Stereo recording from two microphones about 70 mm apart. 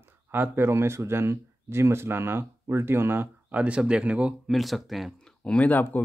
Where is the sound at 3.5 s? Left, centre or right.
Centre.